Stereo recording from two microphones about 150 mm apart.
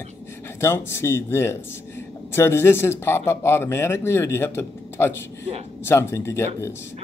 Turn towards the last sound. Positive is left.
turn(degrees=20)  # may be behind; listen again after turning